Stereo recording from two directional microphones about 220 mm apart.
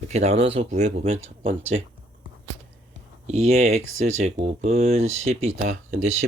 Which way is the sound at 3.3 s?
30° right (ahead or behind).